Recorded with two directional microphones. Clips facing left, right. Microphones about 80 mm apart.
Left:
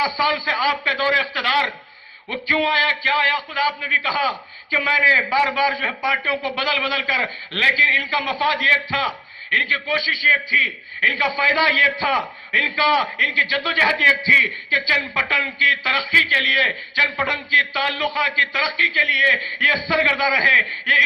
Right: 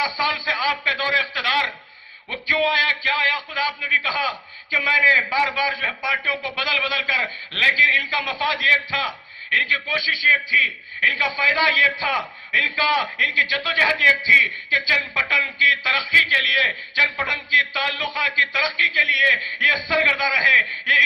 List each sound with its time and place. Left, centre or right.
0.0 s a man's voice: left